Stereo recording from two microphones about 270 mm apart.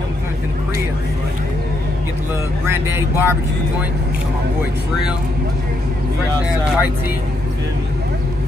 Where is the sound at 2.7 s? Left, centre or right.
Centre.